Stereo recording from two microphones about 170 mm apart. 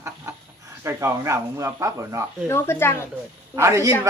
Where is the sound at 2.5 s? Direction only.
15° left (ahead or behind).